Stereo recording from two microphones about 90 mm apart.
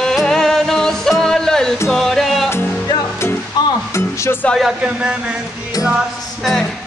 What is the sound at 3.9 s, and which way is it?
Speech, 30° left (ahead or behind).